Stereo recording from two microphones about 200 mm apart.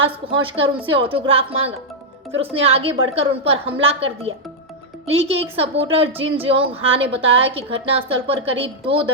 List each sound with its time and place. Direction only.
0.0 s a woman's voice: 25° right (ahead or behind)